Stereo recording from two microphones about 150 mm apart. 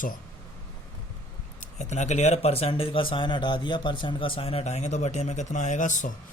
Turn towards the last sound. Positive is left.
turn(degrees=55)  # may be behind; listen again after turning